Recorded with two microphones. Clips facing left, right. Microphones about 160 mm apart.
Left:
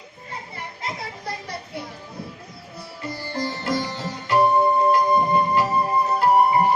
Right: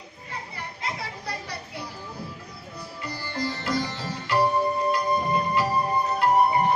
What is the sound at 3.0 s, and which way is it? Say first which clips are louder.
Sitar: left 3 dB; 25° left (ahead or behind).